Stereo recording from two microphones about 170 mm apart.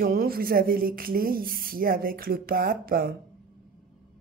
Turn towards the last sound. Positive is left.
turn(degrees=-60)  # may be behind; listen again after turning